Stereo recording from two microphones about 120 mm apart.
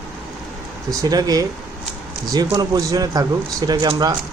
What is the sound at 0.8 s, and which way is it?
Speech, 30° right (ahead or behind).